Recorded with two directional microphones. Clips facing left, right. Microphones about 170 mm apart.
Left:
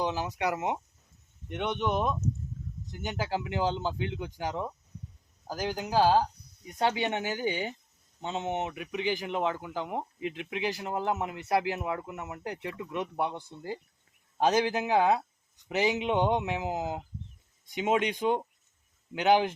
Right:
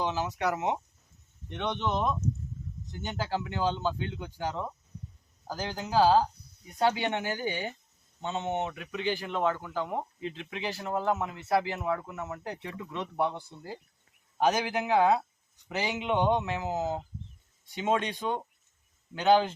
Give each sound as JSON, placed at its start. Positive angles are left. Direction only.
{"t": 0.0, "sound": "speech", "side_deg": 15}